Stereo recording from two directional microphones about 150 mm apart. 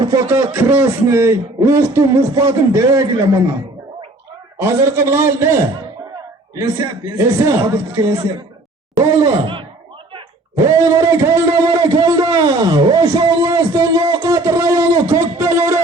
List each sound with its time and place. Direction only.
0.0 s a man's voice: 20° right (ahead or behind)
4.6 s a man's voice: 15° right (ahead or behind)
10.6 s a man's voice: 20° right (ahead or behind)
12.1 s a sound: 25° right (ahead or behind)